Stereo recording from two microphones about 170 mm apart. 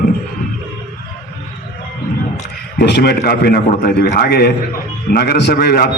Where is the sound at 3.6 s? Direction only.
50° left (ahead or behind).